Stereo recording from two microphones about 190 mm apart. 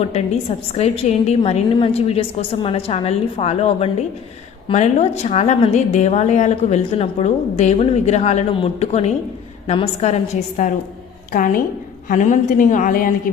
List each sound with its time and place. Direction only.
0.1 s a woman's voice: 35° left (ahead or behind)